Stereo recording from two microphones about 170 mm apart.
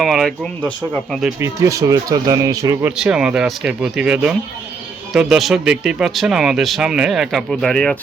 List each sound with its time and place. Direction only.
0.0 s speech: centre (ahead or behind)
1.4 s speech: 20° right (ahead or behind)
3.0 s speech: 5° right (ahead or behind)